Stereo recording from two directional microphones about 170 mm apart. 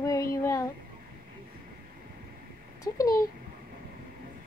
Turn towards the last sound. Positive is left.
turn(degrees=20)  # may be behind; listen again after turning